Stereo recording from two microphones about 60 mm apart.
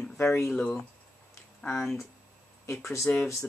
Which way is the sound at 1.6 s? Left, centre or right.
Left.